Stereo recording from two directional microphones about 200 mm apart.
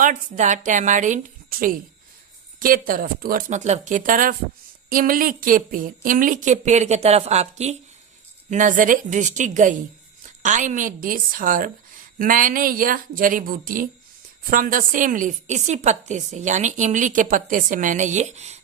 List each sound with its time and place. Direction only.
0.0 s a woman's voice: 40° right (ahead or behind)